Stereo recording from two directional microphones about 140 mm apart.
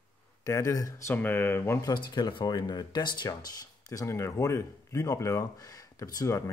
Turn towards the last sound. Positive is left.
turn(degrees=20)  # may be behind; listen again after turning